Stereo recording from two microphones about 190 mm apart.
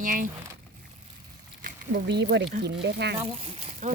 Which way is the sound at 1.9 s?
65° right (ahead or behind).